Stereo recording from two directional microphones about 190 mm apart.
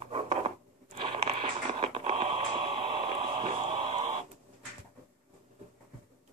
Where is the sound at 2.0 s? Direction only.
30° right (ahead or behind).